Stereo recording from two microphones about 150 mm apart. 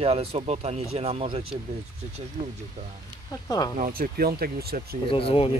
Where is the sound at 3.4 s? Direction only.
25° left (ahead or behind).